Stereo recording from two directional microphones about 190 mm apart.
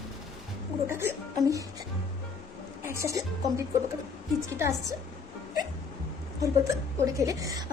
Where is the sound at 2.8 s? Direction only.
15° right (ahead or behind).